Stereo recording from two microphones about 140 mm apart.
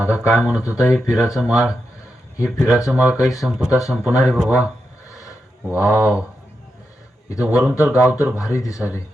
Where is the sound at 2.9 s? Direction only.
10° right (ahead or behind).